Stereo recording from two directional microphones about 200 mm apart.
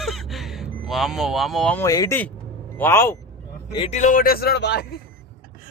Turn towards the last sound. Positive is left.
turn(degrees=55)  # may be behind; listen again after turning